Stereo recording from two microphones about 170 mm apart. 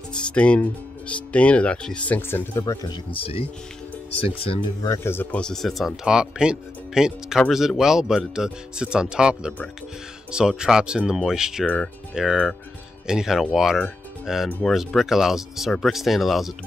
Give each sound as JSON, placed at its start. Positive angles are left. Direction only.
{"t": 0.1, "sound": "speech", "side_deg": 5}
{"t": 2.6, "sound": "speech", "side_deg": 25}
{"t": 4.8, "sound": "speech", "side_deg": 15}
{"t": 11.6, "sound": "speech", "side_deg": 5}
{"t": 12.1, "sound": "speech", "side_deg": -5}